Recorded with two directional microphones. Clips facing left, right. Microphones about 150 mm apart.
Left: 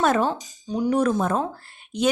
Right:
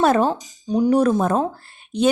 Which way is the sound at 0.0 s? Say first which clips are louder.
Right 4 dB; 35° right (ahead or behind).